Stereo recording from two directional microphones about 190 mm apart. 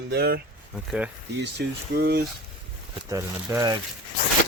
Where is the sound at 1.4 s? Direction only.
60° right (ahead or behind).